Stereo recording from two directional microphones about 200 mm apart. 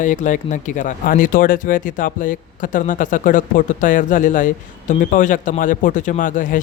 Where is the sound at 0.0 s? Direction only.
40° left (ahead or behind).